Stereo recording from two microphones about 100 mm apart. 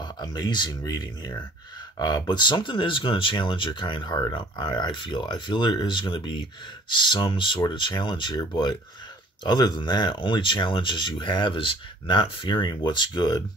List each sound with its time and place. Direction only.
0.0 s speech: 45° left (ahead or behind)